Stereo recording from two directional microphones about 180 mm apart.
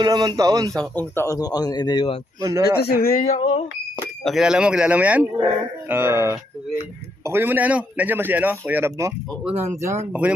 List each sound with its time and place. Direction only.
0.0 s speech: 20° right (ahead or behind)
0.7 s speech: 5° left (ahead or behind); by 2.1 s 25° left (ahead or behind)
2.6 s a man's voice: 60° left (ahead or behind)
3.2 s speech: 35° left (ahead or behind)
3.9 s a man's voice: centre (ahead or behind)